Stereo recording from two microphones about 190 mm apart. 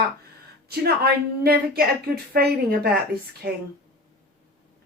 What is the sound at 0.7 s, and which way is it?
A woman's voice, 55° right (ahead or behind).